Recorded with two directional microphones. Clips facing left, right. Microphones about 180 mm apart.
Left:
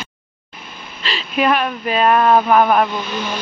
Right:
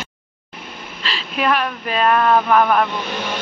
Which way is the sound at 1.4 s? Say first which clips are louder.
Left 3 dB; 10° left (ahead or behind).